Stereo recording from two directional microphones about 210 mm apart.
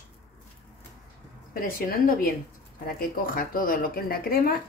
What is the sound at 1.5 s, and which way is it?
Speech, 45° left (ahead or behind).